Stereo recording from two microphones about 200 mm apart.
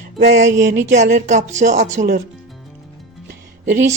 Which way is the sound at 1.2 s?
35° right (ahead or behind).